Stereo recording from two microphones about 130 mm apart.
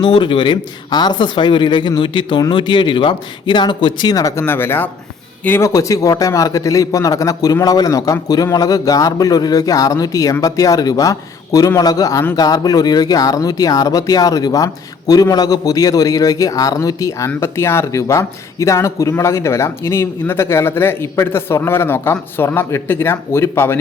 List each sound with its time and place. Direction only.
0.0 s speech: 35° left (ahead or behind); by 23.7 s 20° left (ahead or behind)